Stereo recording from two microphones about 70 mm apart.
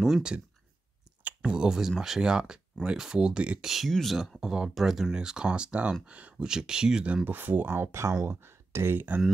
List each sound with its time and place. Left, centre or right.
0.0 s speech: centre
1.4 s speech: centre
3.7 s speech: centre
7.2 s speech: right